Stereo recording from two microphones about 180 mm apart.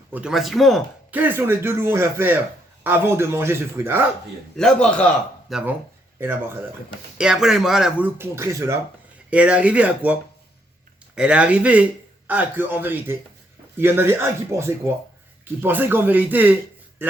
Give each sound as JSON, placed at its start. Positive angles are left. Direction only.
{"t": 0.1, "sound": "speech", "side_deg": -5}
{"t": 1.1, "sound": "speech", "side_deg": -10}
{"t": 4.5, "sound": "speech", "side_deg": 5}
{"t": 7.2, "sound": "speech", "side_deg": -5}